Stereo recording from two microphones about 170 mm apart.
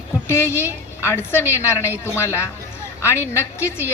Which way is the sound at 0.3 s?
15° left (ahead or behind).